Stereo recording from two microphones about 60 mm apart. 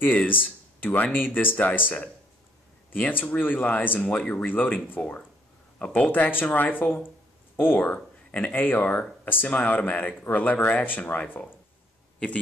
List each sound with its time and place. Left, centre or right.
0.0 s speech: left
4.5 s speech: left